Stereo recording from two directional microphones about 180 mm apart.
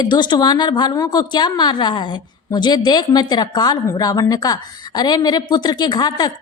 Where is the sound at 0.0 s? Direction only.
25° left (ahead or behind).